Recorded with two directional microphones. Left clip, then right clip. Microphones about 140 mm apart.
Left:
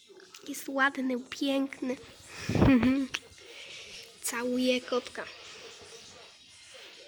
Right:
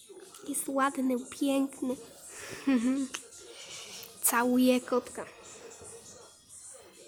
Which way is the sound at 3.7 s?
20° right (ahead or behind).